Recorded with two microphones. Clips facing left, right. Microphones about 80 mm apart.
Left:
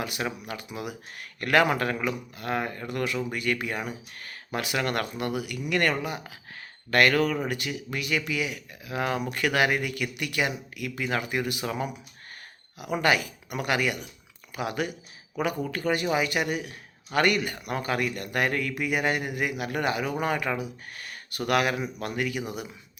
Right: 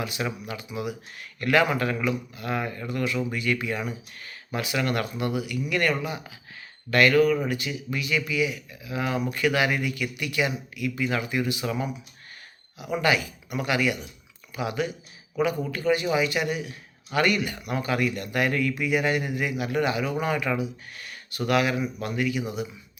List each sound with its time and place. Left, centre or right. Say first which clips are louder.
0.0 s a man's voice: right 1 dB; left
1.9 s speech: right 2 dB; left
2.3 s speech: even; left
12.8 s speech: even; left